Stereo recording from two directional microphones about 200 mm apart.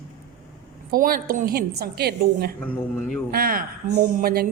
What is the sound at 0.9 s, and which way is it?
A woman's voice, 45° right (ahead or behind).